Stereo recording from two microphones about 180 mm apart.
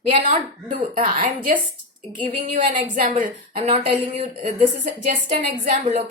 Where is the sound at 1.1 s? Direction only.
45° right (ahead or behind).